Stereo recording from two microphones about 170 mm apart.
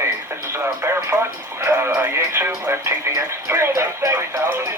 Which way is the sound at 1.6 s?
15° right (ahead or behind).